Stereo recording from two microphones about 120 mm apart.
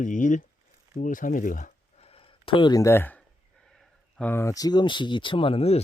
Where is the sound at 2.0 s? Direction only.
50° left (ahead or behind).